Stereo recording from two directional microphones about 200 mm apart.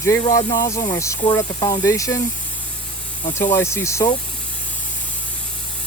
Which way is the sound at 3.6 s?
15° left (ahead or behind).